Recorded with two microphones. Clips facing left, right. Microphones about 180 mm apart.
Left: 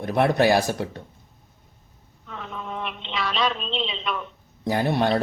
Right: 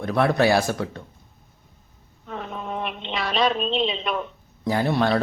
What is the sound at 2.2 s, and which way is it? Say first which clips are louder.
Telephone: right 3 dB; 45° right (ahead or behind).